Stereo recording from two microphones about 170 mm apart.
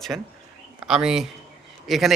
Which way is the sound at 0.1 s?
10° right (ahead or behind).